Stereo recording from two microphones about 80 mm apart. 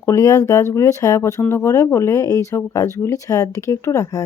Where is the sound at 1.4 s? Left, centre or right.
Left.